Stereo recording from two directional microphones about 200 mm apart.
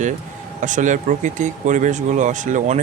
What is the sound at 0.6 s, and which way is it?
Speech, 40° right (ahead or behind).